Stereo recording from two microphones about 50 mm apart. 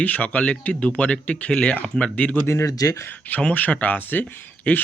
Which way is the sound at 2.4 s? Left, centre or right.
Left.